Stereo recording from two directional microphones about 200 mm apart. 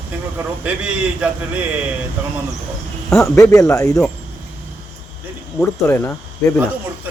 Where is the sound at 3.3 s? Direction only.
15° left (ahead or behind).